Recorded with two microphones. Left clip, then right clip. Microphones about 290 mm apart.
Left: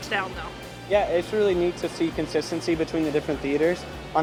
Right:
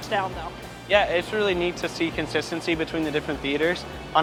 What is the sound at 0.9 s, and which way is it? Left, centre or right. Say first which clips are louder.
Speech: right 1 dB; right.